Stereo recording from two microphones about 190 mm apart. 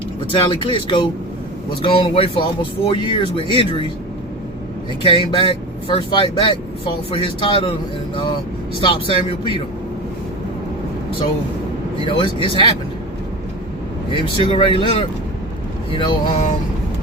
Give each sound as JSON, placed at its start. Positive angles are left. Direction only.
{"t": 0.3, "sound": "speech", "side_deg": 25}
{"t": 5.0, "sound": "speech", "side_deg": 25}
{"t": 12.0, "sound": "speech", "side_deg": 25}
{"t": 14.1, "sound": "speech", "side_deg": 25}